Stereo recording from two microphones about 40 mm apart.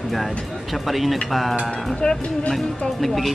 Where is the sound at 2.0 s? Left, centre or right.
Left.